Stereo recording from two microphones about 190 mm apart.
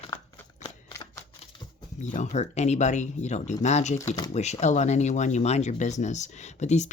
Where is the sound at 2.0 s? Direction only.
40° left (ahead or behind).